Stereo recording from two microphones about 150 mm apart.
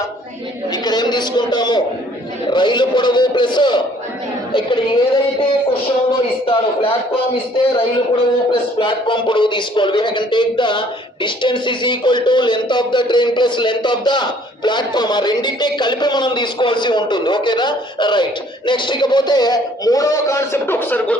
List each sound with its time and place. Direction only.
0.7 s a man's voice: 25° left (ahead or behind); by 21.2 s 10° left (ahead or behind)